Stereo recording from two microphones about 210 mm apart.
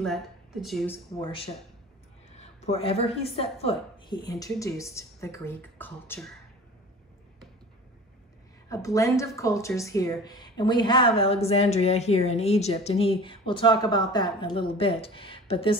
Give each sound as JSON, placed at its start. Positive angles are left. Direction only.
{"t": 0.0, "sound": "a woman's voice", "side_deg": 0}
{"t": 1.2, "sound": "a woman's voice", "side_deg": 25}
{"t": 8.6, "sound": "a woman's voice", "side_deg": 15}